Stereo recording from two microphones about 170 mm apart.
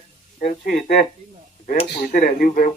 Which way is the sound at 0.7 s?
50° left (ahead or behind).